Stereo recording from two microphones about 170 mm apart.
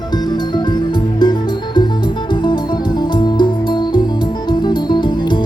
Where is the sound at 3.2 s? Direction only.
25° left (ahead or behind).